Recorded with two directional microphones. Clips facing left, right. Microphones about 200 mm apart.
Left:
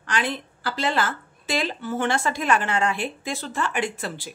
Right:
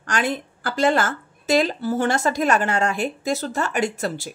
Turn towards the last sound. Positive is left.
turn(degrees=-40)  # may be behind; listen again after turning